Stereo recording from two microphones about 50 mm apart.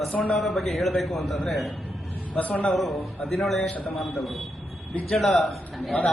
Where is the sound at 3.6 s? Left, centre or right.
Left.